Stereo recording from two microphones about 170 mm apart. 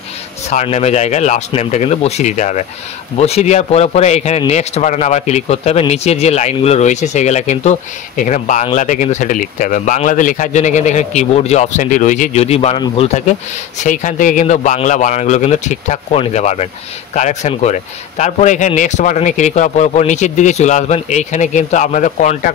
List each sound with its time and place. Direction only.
0.5 s a man's voice: 40° left (ahead or behind)